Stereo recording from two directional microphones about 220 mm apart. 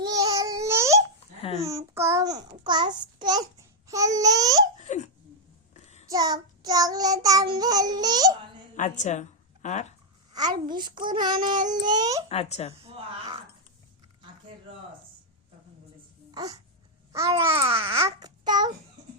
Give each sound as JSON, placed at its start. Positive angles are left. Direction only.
{"t": 0.0, "sound": "baby cry", "side_deg": -15}
{"t": 1.6, "sound": "a child's voice", "side_deg": -15}
{"t": 3.8, "sound": "child singing", "side_deg": -15}
{"t": 4.8, "sound": "laughter", "side_deg": 30}
{"t": 5.7, "sound": "child singing", "side_deg": 30}
{"t": 6.1, "sound": "child singing", "side_deg": -15}
{"t": 8.7, "sound": "a woman's voice", "side_deg": 35}
{"t": 10.3, "sound": "a child's voice", "side_deg": -20}
{"t": 12.3, "sound": "speech", "side_deg": 30}
{"t": 16.3, "sound": "speech", "side_deg": -15}
{"t": 17.1, "sound": "babbling", "side_deg": -15}
{"t": 17.7, "sound": "child singing", "side_deg": -10}
{"t": 18.0, "sound": "babbling", "side_deg": -20}